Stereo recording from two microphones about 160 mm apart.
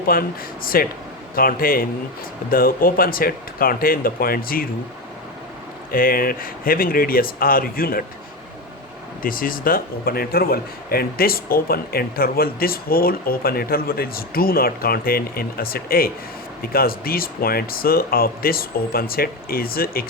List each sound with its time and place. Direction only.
0.1 s speech: 65° left (ahead or behind)
5.9 s speech: 65° left (ahead or behind)
9.2 s a man's voice: 60° left (ahead or behind)